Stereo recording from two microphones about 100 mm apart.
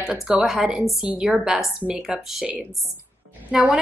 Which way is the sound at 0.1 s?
10° right (ahead or behind).